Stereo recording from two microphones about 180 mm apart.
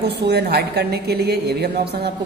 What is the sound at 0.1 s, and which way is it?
A woman's voice, 65° right (ahead or behind).